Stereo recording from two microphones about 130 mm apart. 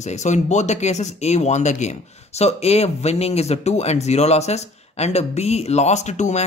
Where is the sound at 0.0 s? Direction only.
65° left (ahead or behind).